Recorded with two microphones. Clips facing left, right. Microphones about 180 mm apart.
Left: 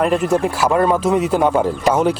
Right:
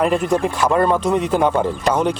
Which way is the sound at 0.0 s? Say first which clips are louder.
Left 1 dB; centre (ahead or behind).